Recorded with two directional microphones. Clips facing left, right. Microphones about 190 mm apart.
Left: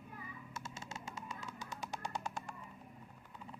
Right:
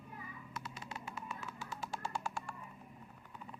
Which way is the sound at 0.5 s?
25° left (ahead or behind).